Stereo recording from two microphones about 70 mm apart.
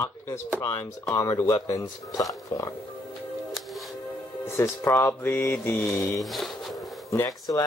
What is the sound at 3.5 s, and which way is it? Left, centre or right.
Music, centre.